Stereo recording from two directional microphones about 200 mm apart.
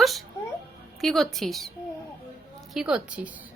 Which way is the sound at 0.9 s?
Centre (ahead or behind).